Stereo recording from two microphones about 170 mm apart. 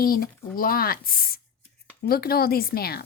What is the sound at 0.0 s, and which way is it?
Speech, 60° left (ahead or behind).